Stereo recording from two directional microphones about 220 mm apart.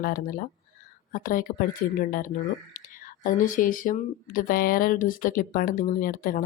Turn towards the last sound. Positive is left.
turn(degrees=40)  # may be behind; listen again after turning